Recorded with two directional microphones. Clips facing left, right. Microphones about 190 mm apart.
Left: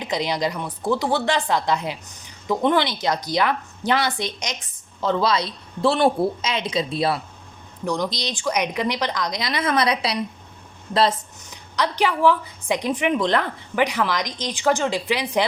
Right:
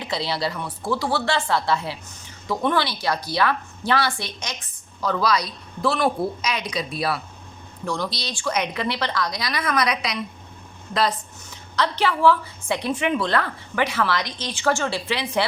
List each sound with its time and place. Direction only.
0.0 s speech: 15° left (ahead or behind)
11.8 s a woman's voice: 15° left (ahead or behind)